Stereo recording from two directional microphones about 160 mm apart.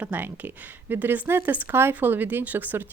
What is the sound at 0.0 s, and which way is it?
Speech, 10° right (ahead or behind).